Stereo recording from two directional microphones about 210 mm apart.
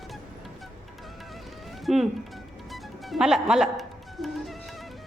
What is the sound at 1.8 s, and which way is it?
Speech, centre (ahead or behind).